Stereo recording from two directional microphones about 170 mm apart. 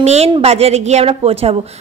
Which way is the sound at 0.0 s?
40° right (ahead or behind).